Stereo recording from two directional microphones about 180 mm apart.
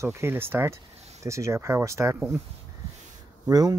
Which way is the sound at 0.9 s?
35° right (ahead or behind).